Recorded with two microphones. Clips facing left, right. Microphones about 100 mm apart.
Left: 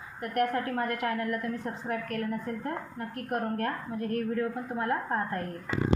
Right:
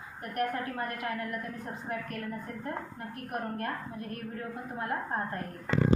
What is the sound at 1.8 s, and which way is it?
A woman's voice, 45° left (ahead or behind).